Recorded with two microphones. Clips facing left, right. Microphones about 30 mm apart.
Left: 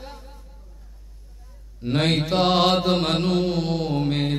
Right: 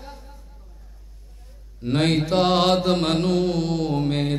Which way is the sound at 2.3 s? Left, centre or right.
Centre.